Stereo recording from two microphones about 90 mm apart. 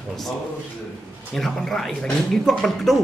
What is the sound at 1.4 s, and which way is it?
Speech, 5° left (ahead or behind).